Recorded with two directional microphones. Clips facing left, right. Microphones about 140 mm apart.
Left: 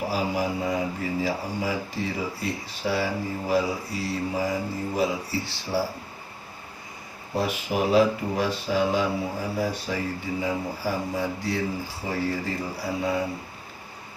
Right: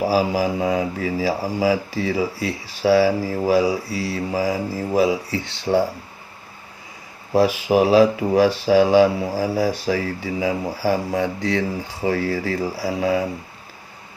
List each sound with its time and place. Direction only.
0.1 s speech: 90° right
5.7 s speech: 65° right (ahead or behind)
7.3 s speech: 90° right